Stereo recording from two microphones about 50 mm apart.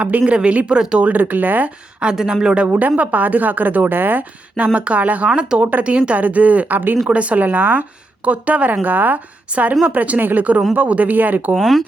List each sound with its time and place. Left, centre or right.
0.3 s speech: right
1.0 s a woman's voice: right
2.0 s speech: centre
2.6 s a woman's voice: right
4.5 s speech: right
5.3 s speech: centre
5.5 s a woman's voice: right
7.1 s a woman's voice: right
8.2 s a woman's voice: right
11.5 s speech: centre